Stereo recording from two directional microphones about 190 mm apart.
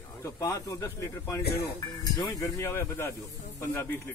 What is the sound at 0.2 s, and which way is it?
A man's voice, 15° left (ahead or behind).